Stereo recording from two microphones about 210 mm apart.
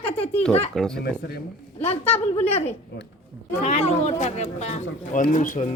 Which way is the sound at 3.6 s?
30° left (ahead or behind).